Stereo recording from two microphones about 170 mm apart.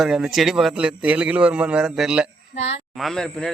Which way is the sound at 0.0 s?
5° right (ahead or behind).